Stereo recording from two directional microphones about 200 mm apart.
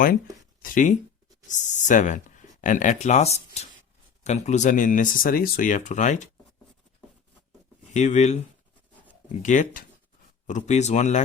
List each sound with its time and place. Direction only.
0.6 s speech: 40° left (ahead or behind)
7.9 s speech: 35° left (ahead or behind)